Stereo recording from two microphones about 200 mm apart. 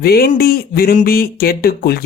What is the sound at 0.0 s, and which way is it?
Speech, 50° left (ahead or behind).